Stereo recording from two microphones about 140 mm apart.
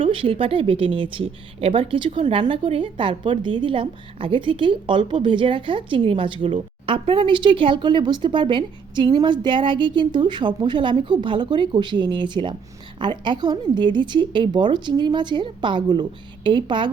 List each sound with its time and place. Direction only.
0.0 s a woman's voice: 40° right (ahead or behind)